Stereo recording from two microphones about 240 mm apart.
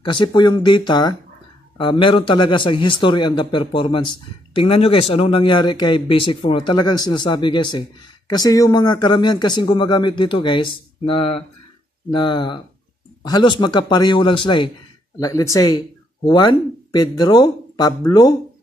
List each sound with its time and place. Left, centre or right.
0.0 s speech: centre